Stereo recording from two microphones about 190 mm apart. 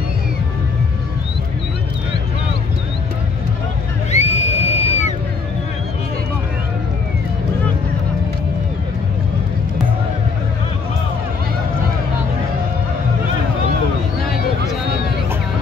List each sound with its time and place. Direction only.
4.1 s music: 35° left (ahead or behind)